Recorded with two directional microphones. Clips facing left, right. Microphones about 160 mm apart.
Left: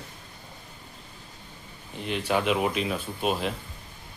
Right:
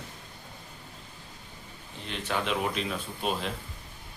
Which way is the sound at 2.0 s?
10° left (ahead or behind).